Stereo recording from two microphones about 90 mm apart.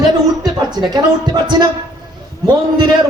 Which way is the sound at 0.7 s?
50° right (ahead or behind).